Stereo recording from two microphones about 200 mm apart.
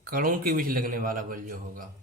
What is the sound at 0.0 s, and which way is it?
A man's voice, 45° right (ahead or behind).